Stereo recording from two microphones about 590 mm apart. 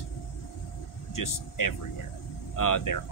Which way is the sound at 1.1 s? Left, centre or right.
Left.